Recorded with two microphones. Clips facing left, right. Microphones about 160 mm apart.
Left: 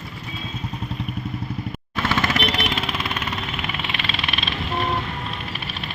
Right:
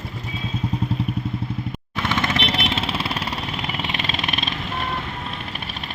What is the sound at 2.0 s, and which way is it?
Jackhammer, 20° right (ahead or behind).